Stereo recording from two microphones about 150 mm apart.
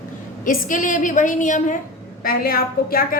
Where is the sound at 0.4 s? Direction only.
60° left (ahead or behind).